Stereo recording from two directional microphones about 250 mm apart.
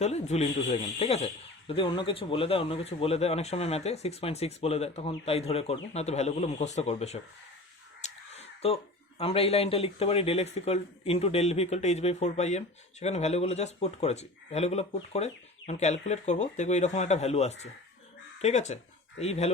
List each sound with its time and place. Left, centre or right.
0.0 s speech: left